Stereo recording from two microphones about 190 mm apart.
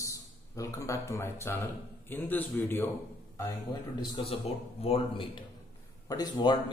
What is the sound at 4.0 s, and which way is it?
A man's voice, 30° left (ahead or behind).